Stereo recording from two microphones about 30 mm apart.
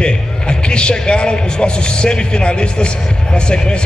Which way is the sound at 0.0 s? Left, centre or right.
Left.